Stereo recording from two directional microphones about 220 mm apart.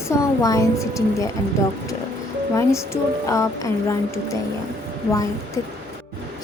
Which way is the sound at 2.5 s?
15° left (ahead or behind).